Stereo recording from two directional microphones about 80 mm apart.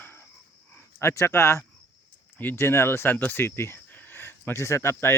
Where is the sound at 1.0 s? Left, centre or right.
Left.